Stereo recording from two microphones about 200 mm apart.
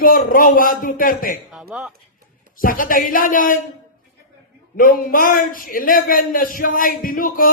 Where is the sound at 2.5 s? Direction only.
45° left (ahead or behind).